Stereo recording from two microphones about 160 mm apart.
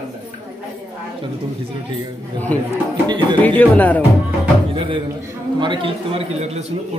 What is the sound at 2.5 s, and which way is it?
Speech, 10° left (ahead or behind).